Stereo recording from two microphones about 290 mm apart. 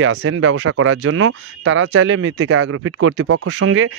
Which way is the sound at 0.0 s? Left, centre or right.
Right.